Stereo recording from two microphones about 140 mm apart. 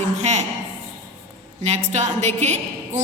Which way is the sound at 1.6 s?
50° right (ahead or behind).